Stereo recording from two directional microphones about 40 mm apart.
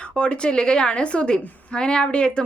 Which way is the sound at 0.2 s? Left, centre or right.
Left.